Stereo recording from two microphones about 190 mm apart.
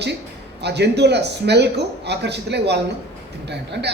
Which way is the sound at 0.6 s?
60° right (ahead or behind).